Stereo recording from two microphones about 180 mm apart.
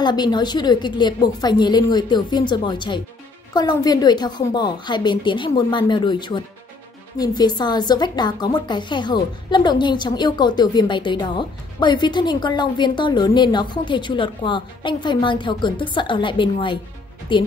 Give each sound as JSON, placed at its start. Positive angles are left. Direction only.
{"t": 0.0, "sound": "a woman's voice", "side_deg": 25}